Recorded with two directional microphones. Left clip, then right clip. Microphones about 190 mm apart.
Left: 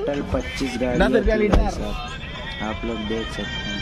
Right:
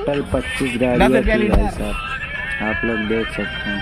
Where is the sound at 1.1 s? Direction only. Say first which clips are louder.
Right 3 dB; 25° right (ahead or behind).